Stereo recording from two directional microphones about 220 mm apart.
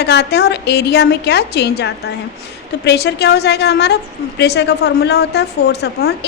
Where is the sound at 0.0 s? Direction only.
50° left (ahead or behind).